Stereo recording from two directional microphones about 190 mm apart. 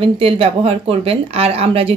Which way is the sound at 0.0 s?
30° right (ahead or behind).